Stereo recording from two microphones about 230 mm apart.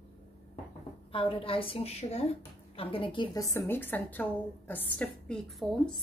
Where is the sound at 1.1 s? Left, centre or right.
Left.